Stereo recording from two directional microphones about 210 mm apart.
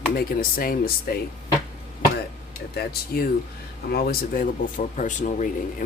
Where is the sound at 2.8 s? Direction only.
45° left (ahead or behind).